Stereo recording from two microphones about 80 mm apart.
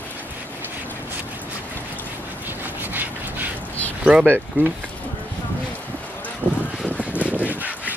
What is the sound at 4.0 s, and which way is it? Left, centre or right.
Speech, centre.